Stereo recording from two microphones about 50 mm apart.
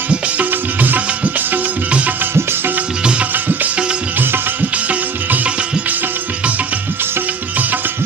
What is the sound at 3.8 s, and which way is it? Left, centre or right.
Music, right.